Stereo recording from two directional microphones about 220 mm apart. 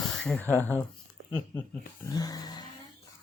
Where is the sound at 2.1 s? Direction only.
15° left (ahead or behind).